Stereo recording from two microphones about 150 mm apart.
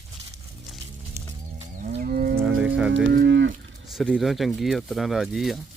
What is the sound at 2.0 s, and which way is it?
Moo, 65° right (ahead or behind).